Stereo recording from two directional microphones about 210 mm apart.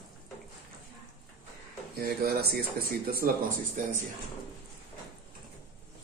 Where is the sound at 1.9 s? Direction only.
45° right (ahead or behind).